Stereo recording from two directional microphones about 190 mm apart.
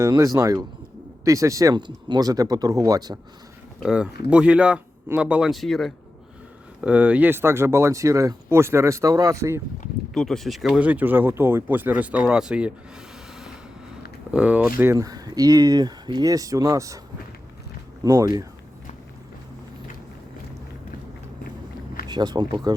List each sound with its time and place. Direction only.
0.0 s speech: 15° right (ahead or behind)
3.8 s speech: 5° right (ahead or behind)
10.2 s speech: centre (ahead or behind)
14.3 s speech: 5° right (ahead or behind)
18.0 s speech: 20° right (ahead or behind)
22.1 s speech: 20° right (ahead or behind)